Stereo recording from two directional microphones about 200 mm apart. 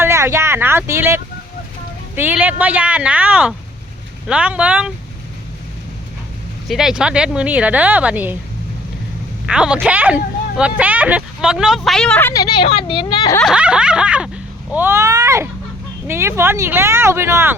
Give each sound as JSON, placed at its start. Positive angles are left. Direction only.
{"t": 0.0, "sound": "speech", "side_deg": -15}
{"t": 6.7, "sound": "speech", "side_deg": 0}
{"t": 9.5, "sound": "speech", "side_deg": -5}
{"t": 12.3, "sound": "speech", "side_deg": 20}
{"t": 13.4, "sound": "speech", "side_deg": -5}